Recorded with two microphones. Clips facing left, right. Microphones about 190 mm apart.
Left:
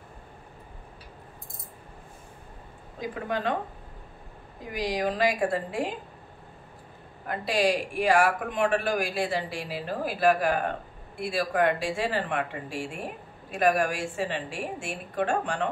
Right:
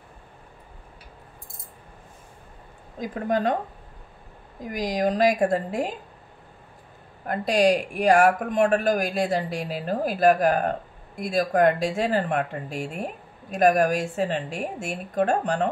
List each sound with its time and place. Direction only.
3.0 s a woman's voice: 40° right (ahead or behind)
4.7 s a woman's voice: 40° right (ahead or behind)
7.2 s a woman's voice: 45° right (ahead or behind)